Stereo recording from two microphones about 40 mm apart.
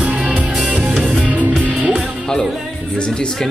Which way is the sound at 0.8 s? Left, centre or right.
Centre.